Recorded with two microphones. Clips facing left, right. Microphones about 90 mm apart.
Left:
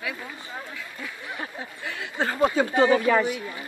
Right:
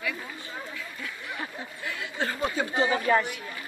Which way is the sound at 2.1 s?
35° left (ahead or behind).